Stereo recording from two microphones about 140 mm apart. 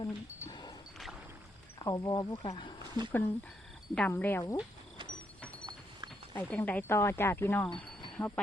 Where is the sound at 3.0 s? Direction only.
30° right (ahead or behind).